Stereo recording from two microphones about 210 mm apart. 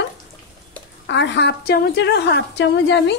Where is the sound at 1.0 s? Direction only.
55° left (ahead or behind).